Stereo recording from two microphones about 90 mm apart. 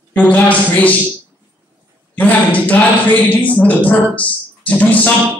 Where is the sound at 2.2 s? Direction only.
15° left (ahead or behind).